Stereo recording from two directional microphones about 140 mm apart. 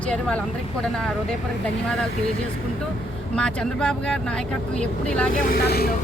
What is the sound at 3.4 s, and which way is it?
Speech, 5° left (ahead or behind).